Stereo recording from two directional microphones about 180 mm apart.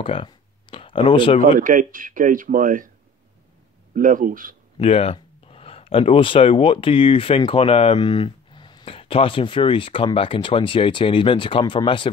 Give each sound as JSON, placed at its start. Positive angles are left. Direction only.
{"t": 0.0, "sound": "a sound", "side_deg": 30}
{"t": 1.4, "sound": "speech", "side_deg": -50}
{"t": 3.9, "sound": "speech", "side_deg": -50}
{"t": 4.7, "sound": "speech", "side_deg": 35}